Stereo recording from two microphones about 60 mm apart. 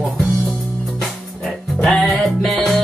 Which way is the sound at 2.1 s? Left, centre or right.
Centre.